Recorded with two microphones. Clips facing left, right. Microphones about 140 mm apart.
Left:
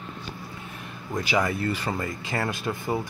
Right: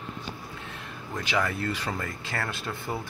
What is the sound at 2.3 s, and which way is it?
Speech, 15° left (ahead or behind).